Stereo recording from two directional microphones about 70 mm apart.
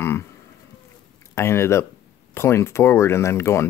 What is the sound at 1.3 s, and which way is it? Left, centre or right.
Speech, left.